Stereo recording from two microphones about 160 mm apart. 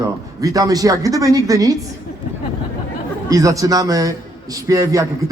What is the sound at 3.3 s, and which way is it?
A man's voice, 20° right (ahead or behind).